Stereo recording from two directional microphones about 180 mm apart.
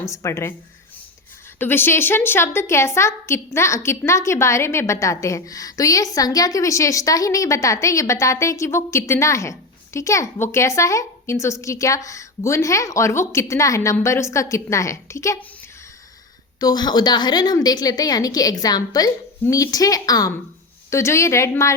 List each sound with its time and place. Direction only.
0.0 s a woman's voice: 15° left (ahead or behind)
1.5 s a woman's voice: 10° left (ahead or behind)
16.6 s a woman's voice: 20° left (ahead or behind)